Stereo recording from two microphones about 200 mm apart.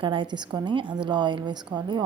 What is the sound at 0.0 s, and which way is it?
A woman's voice, 25° right (ahead or behind).